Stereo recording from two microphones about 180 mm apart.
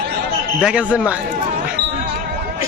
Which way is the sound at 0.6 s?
5° right (ahead or behind).